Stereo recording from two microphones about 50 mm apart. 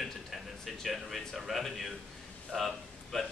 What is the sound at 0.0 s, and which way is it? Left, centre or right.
A man's voice, centre.